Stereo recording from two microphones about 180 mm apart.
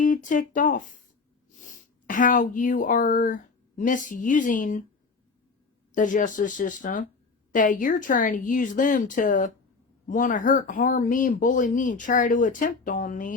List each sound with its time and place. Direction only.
0.0 s speech: 45° left (ahead or behind)
5.9 s speech: 45° left (ahead or behind)